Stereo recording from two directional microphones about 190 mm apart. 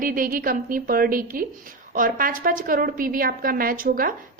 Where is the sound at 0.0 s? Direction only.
50° right (ahead or behind).